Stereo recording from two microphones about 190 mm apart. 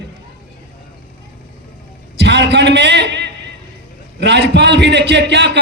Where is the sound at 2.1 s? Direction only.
65° right (ahead or behind).